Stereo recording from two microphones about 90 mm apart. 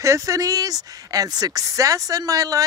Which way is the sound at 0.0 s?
35° right (ahead or behind).